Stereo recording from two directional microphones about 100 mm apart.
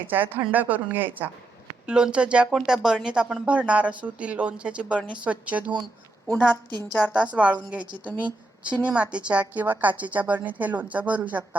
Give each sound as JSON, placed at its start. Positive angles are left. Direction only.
{"t": 0.1, "sound": "speech", "side_deg": -20}
{"t": 6.3, "sound": "a woman's voice", "side_deg": 20}
{"t": 6.7, "sound": "a woman's voice", "side_deg": -45}
{"t": 7.1, "sound": "speech", "side_deg": -15}
{"t": 7.9, "sound": "a woman's voice", "side_deg": -50}
{"t": 8.7, "sound": "speech", "side_deg": -10}